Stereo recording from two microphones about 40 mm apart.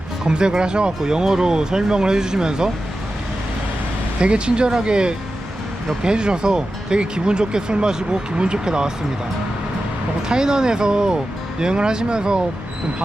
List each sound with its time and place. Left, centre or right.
0.3 s speech: right
4.2 s speech: right
10.2 s speech: centre